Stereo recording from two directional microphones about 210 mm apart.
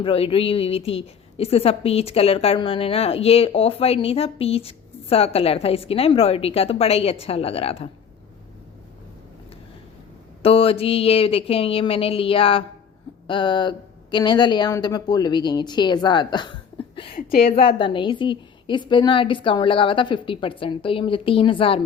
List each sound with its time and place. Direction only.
0.0 s a woman's voice: 25° left (ahead or behind)
10.4 s a woman's voice: 25° left (ahead or behind)
17.2 s a woman's voice: 45° left (ahead or behind)
17.5 s a woman's voice: 25° left (ahead or behind)